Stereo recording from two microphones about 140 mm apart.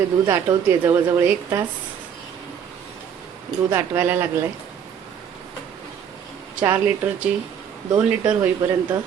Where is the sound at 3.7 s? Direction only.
15° right (ahead or behind).